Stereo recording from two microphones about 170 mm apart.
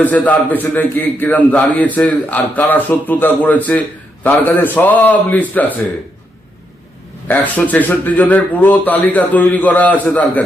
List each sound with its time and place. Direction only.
0.0 s a man's voice: 10° left (ahead or behind)
7.3 s a man's voice: 10° left (ahead or behind)